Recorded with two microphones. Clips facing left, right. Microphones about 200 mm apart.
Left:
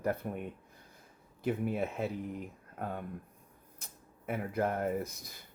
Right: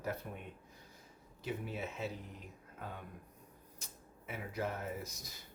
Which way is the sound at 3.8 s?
55° left (ahead or behind).